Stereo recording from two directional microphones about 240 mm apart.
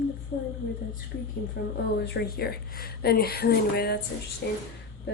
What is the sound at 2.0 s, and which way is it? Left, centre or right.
Speech, left.